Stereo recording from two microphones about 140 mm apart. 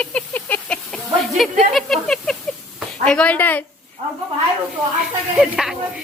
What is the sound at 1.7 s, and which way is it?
A woman's voice, centre (ahead or behind).